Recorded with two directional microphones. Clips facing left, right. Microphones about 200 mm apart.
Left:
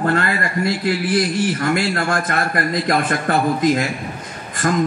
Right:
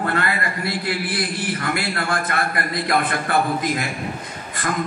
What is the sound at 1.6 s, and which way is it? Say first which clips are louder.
A man's voice: left 5 dB; 45° left (ahead or behind).